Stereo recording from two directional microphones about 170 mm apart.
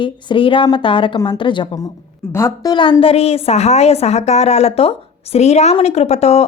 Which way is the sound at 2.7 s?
30° left (ahead or behind).